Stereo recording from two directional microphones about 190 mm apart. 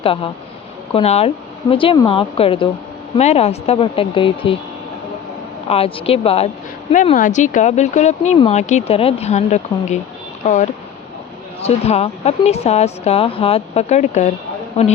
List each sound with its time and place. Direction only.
0.0 s a woman's voice: 30° left (ahead or behind)
5.6 s speech: 30° left (ahead or behind)